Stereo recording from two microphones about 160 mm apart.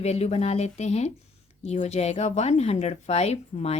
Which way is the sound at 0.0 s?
40° left (ahead or behind).